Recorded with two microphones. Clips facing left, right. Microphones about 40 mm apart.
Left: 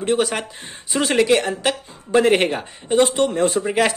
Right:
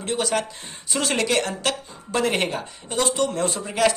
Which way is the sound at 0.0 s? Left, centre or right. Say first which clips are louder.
Left 4 dB; left.